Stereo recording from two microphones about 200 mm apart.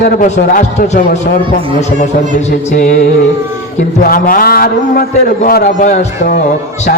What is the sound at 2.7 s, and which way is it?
Speech, 45° left (ahead or behind).